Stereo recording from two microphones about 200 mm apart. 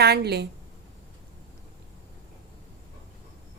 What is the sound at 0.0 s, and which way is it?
Speech, 55° right (ahead or behind).